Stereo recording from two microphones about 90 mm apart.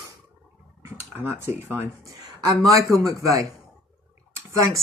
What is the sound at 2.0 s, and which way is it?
Speech, 40° right (ahead or behind).